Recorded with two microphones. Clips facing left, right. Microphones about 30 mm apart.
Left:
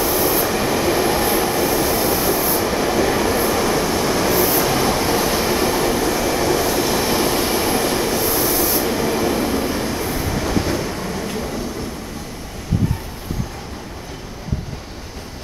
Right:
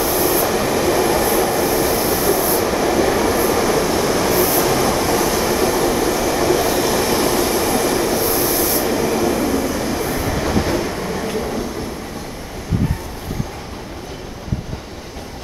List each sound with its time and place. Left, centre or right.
0.0 s train: centre
1.1 s train: centre
7.3 s train: centre
8.0 s train: centre
9.1 s train: centre
9.6 s vehicle: left
9.8 s train: centre